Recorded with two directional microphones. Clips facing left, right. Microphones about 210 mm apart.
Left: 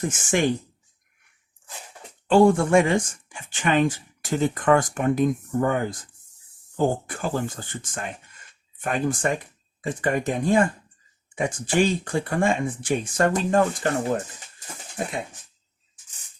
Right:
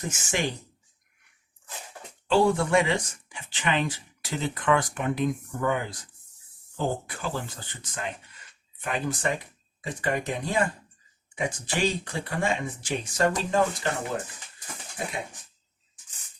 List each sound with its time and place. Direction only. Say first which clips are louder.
0.1 s speech: left 5 dB; 50° left (ahead or behind)
2.2 s speech: left 5 dB; 50° left (ahead or behind)